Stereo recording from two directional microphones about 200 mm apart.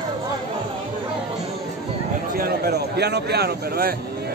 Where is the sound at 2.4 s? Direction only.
55° right (ahead or behind).